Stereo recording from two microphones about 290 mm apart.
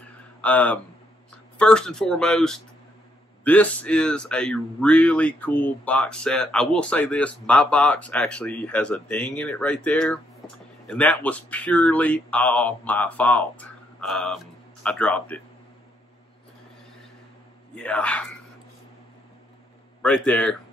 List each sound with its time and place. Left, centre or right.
0.4 s speech: centre
17.7 s speech: centre
20.0 s speech: centre